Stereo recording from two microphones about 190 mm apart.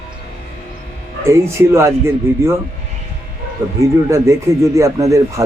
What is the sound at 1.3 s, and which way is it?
Speech, 15° right (ahead or behind).